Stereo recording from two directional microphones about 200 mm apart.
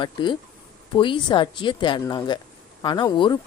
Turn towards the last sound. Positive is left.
turn(degrees=20)  # may be behind; listen again after turning